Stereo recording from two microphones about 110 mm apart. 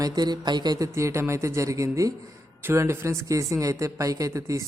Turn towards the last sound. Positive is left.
turn(degrees=-30)  # may be behind; listen again after turning